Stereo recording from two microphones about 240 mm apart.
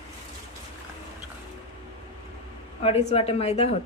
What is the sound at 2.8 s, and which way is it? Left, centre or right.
Speech, left.